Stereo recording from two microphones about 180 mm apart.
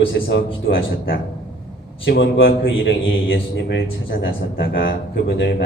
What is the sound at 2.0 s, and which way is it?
A man's voice, 75° left (ahead or behind).